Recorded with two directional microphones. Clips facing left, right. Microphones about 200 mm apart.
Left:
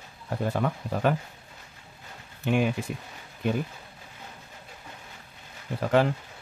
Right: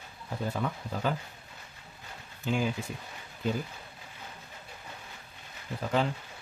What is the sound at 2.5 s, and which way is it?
Speech, 65° left (ahead or behind).